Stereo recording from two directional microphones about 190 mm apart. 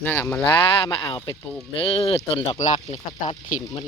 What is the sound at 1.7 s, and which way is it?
Speech, 30° left (ahead or behind).